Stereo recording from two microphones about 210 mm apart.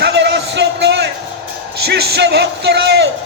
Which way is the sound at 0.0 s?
55° right (ahead or behind).